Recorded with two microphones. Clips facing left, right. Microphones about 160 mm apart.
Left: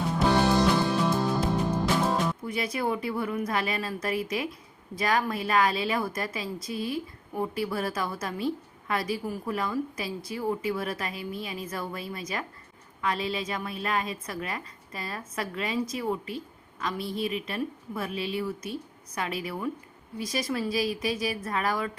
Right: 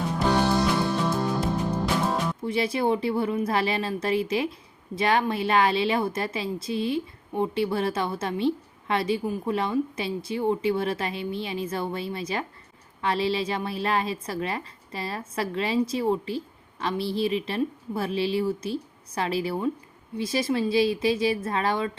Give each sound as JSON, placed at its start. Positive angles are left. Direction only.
{"t": 0.1, "sound": "music", "side_deg": 5}
{"t": 2.4, "sound": "speech", "side_deg": -30}